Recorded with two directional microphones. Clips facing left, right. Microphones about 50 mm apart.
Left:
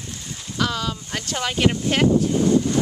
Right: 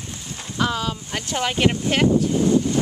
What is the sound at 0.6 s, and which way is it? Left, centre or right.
Speech, centre.